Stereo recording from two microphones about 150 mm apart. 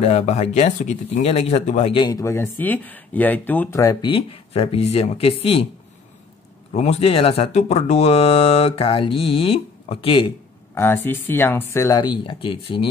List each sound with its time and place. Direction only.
0.0 s speech: 45° left (ahead or behind)
2.0 s speech: 25° left (ahead or behind)
4.0 s speech: 40° left (ahead or behind)
6.7 s speech: 45° left (ahead or behind)
10.7 s speech: 15° left (ahead or behind); by 12.8 s 35° left (ahead or behind)